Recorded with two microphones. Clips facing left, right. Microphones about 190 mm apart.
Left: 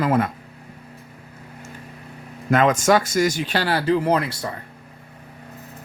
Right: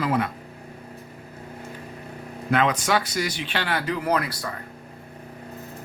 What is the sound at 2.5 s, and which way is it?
Speech, 45° left (ahead or behind).